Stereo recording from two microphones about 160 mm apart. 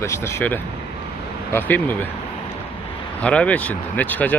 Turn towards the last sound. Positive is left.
turn(degrees=10)  # may be behind; listen again after turning